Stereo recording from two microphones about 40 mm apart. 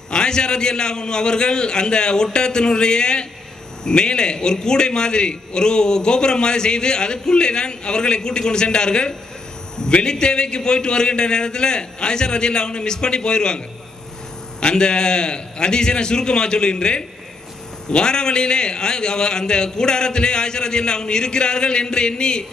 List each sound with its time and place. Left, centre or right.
0.1 s a man's voice: left
14.6 s a man's voice: left